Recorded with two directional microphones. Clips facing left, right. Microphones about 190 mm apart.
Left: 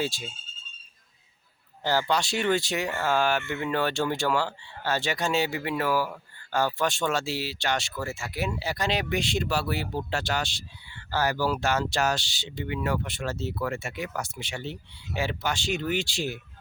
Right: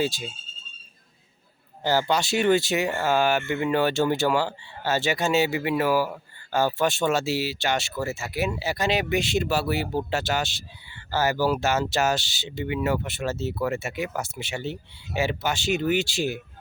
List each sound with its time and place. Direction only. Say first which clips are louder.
0.0 s speech: right 4 dB; centre (ahead or behind)
1.8 s speech: right 2 dB; 5° right (ahead or behind)